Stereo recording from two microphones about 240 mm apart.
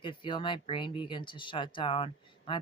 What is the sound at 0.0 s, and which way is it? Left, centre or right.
Speech, left.